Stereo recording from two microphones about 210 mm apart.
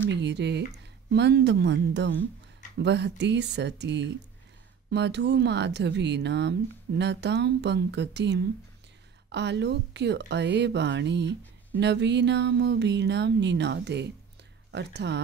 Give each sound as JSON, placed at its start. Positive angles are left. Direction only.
{"t": 0.1, "sound": "speech", "side_deg": -55}